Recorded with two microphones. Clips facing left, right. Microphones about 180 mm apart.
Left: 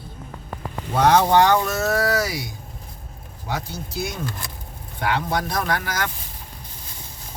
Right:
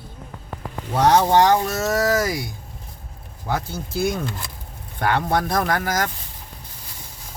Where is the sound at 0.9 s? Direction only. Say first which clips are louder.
Even; 40° right (ahead or behind).